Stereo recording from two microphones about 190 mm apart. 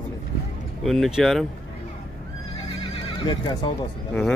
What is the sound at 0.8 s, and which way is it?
Speech, centre (ahead or behind).